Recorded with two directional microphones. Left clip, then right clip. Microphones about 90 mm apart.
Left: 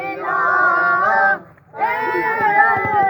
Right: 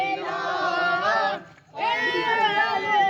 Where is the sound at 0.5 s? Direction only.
80° right.